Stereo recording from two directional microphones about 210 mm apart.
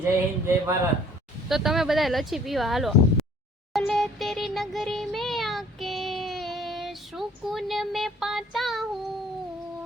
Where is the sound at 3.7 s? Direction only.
Centre (ahead or behind).